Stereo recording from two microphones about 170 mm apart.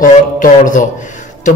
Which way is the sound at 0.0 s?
50° left (ahead or behind).